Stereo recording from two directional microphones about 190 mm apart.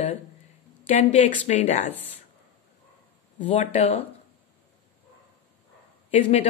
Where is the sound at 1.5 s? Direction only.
40° left (ahead or behind).